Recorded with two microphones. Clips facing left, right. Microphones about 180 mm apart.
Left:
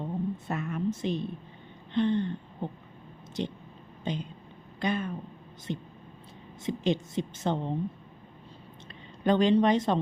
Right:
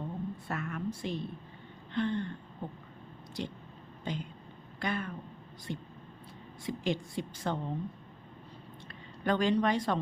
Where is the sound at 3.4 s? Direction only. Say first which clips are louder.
Left 5 dB; 20° left (ahead or behind).